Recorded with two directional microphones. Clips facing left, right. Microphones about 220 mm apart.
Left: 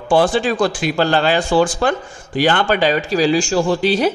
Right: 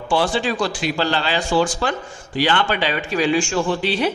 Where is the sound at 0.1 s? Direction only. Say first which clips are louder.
Left 5 dB; 50° left (ahead or behind).